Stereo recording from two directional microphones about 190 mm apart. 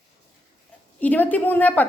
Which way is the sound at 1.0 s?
10° left (ahead or behind).